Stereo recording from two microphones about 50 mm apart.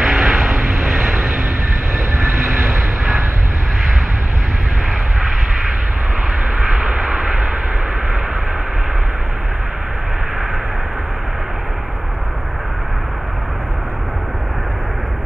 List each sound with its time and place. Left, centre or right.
0.0 s vehicle: centre
6.6 s vehicle: centre